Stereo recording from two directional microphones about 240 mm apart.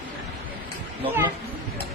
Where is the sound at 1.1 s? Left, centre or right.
Centre.